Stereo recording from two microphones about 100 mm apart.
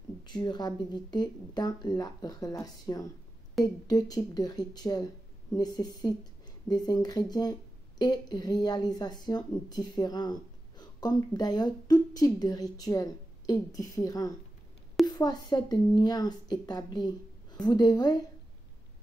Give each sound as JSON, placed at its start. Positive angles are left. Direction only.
{"t": 0.2, "sound": "a woman's voice", "side_deg": 45}